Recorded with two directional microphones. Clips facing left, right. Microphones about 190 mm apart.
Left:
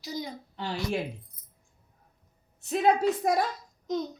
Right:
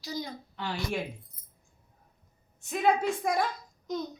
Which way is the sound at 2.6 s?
40° left (ahead or behind).